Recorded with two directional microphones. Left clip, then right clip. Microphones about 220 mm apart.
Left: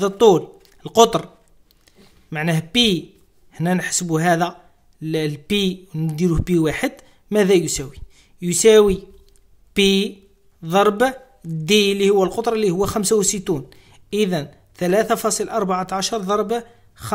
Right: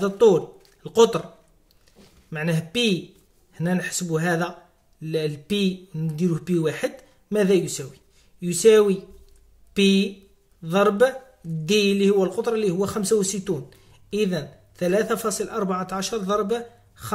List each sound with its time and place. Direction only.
0.0 s a man's voice: 40° left (ahead or behind)
2.2 s a man's voice: 40° left (ahead or behind)